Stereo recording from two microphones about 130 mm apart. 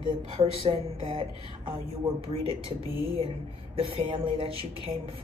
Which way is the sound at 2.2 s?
45° right (ahead or behind).